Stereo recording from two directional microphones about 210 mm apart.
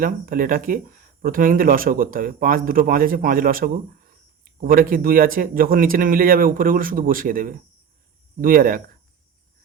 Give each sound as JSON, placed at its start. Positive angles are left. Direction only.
{"t": 0.0, "sound": "a man's voice", "side_deg": -40}